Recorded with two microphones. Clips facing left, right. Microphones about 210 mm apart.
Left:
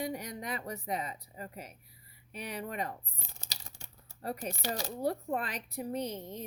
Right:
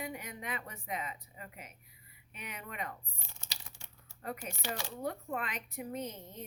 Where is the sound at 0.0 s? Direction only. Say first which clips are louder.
Left 5 dB; 35° left (ahead or behind).